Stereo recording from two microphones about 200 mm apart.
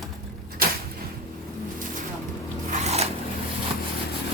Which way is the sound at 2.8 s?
30° right (ahead or behind).